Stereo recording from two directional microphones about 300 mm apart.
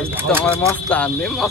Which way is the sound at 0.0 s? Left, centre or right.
Centre.